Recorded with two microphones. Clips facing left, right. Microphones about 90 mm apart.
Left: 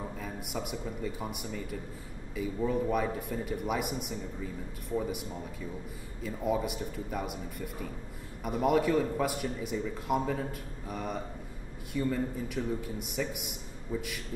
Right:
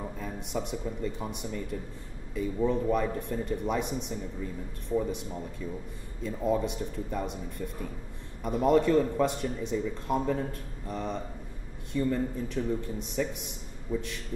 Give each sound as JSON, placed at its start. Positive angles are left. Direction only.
{"t": 0.2, "sound": "speech", "side_deg": 5}
{"t": 6.2, "sound": "speech", "side_deg": 5}